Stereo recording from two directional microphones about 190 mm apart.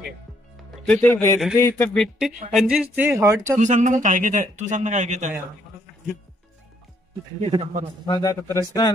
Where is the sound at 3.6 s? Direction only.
40° right (ahead or behind).